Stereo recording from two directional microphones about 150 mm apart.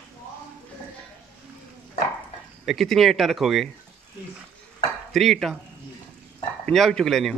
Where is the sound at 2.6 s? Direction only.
Centre (ahead or behind).